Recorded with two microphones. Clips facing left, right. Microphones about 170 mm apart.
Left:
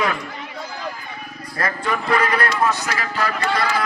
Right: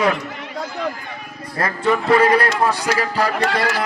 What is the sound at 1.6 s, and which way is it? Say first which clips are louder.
A man's voice: right 5 dB; 30° right (ahead or behind).